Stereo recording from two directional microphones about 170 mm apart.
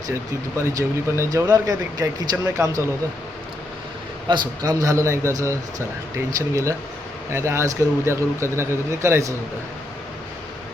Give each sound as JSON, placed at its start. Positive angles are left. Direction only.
{"t": 0.1, "sound": "speech", "side_deg": -20}
{"t": 4.3, "sound": "speech", "side_deg": -20}